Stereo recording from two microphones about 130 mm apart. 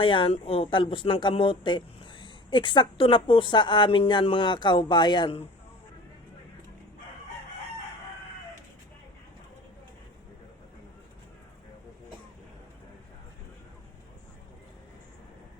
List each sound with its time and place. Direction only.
0.0 s speech: 40° left (ahead or behind)